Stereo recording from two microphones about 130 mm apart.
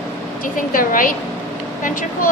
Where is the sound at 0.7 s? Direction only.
90° left.